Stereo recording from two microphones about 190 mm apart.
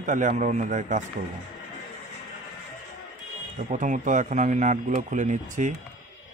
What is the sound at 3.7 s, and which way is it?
A man's voice, 40° right (ahead or behind).